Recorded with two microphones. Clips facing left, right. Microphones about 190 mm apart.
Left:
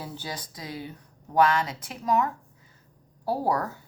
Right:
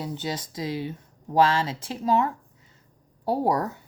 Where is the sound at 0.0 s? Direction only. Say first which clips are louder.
Right 6 dB; 20° right (ahead or behind).